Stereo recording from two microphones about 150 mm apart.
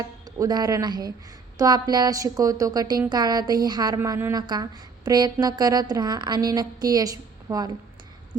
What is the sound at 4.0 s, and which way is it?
Speech, 15° right (ahead or behind).